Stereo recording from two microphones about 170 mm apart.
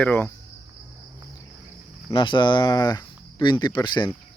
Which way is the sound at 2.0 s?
25° left (ahead or behind).